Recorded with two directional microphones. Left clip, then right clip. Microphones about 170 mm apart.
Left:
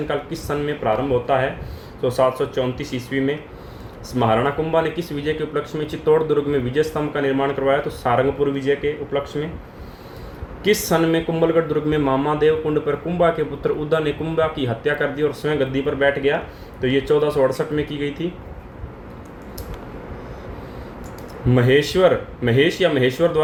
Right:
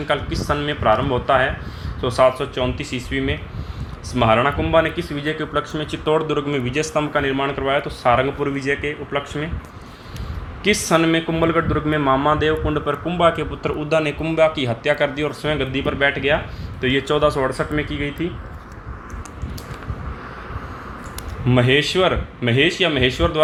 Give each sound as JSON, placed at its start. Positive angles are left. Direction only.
{"t": 0.1, "sound": "speech", "side_deg": -20}
{"t": 10.6, "sound": "speech", "side_deg": -25}
{"t": 21.5, "sound": "speech", "side_deg": -30}